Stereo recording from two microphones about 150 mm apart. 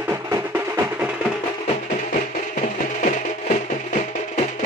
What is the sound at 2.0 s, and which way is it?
Music, 55° left (ahead or behind).